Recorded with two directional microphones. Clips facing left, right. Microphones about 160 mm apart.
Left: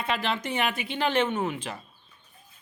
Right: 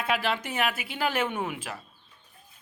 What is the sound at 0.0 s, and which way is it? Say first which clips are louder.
Speech: right 1 dB; 5° right (ahead or behind).